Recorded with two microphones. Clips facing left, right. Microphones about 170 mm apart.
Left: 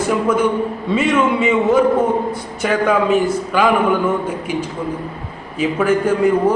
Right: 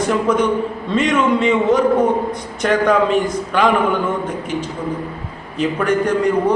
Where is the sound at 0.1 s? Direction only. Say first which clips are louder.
Left 1 dB; 5° left (ahead or behind).